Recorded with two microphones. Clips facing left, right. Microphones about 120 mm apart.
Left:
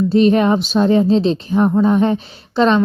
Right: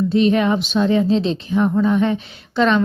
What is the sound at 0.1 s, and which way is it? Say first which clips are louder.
Speech: left 4 dB; 40° left (ahead or behind).